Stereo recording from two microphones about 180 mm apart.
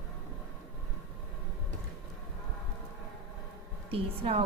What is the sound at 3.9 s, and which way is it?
Speech, 30° right (ahead or behind).